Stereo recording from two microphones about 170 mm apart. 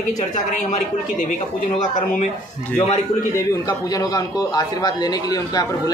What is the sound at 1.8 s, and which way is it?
Speech, 50° left (ahead or behind).